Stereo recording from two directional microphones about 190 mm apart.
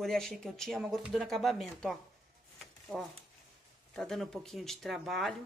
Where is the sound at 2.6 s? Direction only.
Centre (ahead or behind).